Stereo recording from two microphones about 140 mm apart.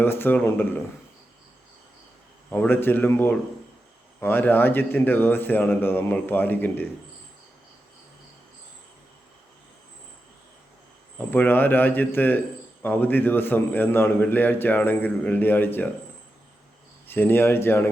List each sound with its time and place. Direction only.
0.0 s a man's voice: 15° left (ahead or behind)
2.5 s a man's voice: 15° left (ahead or behind)
11.3 s a man's voice: 15° left (ahead or behind)
17.1 s a man's voice: 15° left (ahead or behind)